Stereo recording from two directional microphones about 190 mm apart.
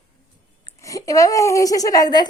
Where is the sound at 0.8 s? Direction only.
15° left (ahead or behind).